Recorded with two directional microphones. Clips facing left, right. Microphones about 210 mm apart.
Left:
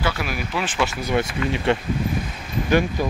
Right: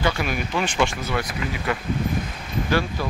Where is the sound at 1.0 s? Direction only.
25° left (ahead or behind).